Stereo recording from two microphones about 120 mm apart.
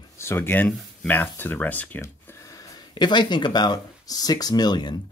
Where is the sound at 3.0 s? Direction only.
40° left (ahead or behind).